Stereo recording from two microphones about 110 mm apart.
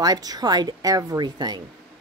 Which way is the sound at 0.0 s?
35° right (ahead or behind).